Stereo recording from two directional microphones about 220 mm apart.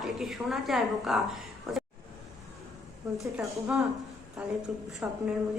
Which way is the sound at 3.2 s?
Centre (ahead or behind).